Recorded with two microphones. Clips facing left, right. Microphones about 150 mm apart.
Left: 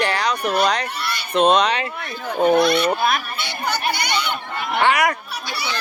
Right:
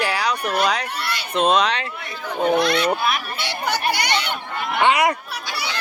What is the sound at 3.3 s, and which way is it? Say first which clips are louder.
Speech: right 1 dB; 90° right.